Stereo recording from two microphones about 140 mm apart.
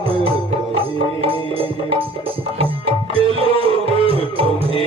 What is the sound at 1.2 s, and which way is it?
Music, 40° right (ahead or behind).